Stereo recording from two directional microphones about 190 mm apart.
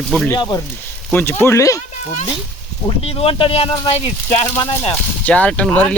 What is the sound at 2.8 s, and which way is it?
Speech, 30° left (ahead or behind).